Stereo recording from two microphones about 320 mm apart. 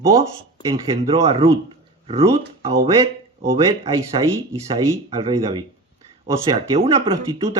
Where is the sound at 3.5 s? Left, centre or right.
Centre.